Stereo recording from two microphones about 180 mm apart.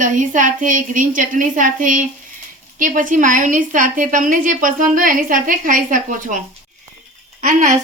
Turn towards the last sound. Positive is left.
turn(degrees=-40)  # may be behind; listen again after turning